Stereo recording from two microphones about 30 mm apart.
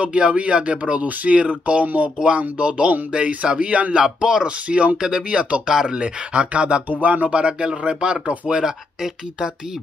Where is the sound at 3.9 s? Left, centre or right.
Right.